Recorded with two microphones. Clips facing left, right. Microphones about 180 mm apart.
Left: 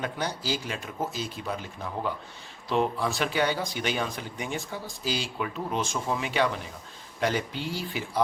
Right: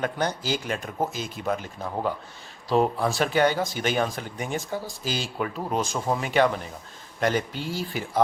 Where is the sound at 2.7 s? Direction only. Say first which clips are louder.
Right 4 dB; 40° right (ahead or behind).